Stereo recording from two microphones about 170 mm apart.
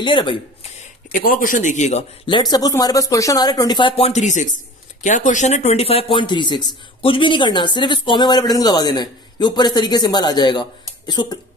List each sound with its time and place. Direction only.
0.0 s speech: 30° left (ahead or behind)
1.1 s a man's voice: 55° left (ahead or behind)
2.5 s speech: 20° left (ahead or behind)